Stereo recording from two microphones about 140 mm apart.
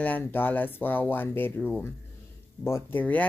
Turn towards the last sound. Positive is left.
turn(degrees=10)  # may be behind; listen again after turning